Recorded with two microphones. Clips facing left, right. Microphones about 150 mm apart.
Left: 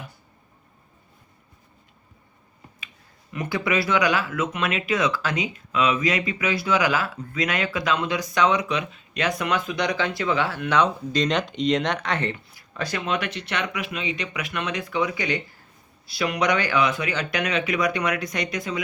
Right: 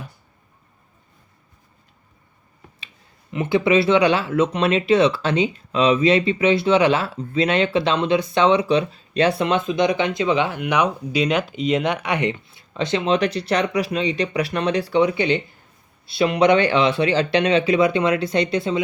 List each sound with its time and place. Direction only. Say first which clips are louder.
3.3 s speech: right 7 dB; 25° right (ahead or behind)